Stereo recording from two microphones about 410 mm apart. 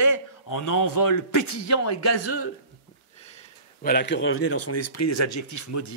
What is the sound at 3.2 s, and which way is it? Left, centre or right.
Speech, centre.